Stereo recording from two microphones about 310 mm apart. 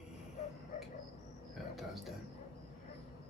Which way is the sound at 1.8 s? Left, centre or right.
Centre.